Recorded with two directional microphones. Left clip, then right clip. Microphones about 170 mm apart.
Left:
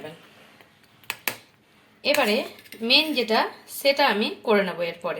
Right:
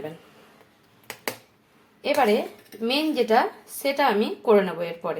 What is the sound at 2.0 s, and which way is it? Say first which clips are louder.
Speech: right 1 dB; 15° right (ahead or behind).